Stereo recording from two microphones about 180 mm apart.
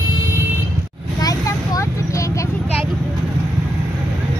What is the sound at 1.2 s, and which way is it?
Vehicle, 20° left (ahead or behind).